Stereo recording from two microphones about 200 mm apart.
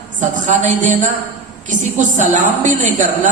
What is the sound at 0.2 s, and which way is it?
Speech, 40° right (ahead or behind).